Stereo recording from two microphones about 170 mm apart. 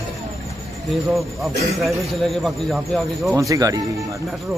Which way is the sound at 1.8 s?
Centre (ahead or behind).